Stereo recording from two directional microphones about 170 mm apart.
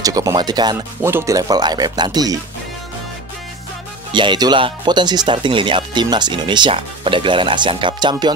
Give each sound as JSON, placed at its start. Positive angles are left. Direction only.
{"t": 0.0, "sound": "speech", "side_deg": -20}
{"t": 4.1, "sound": "speech", "side_deg": -25}